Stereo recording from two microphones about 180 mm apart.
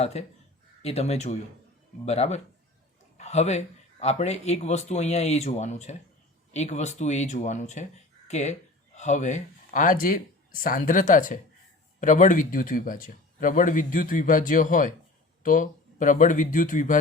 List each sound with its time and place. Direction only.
0.0 s a man's voice: 35° left (ahead or behind)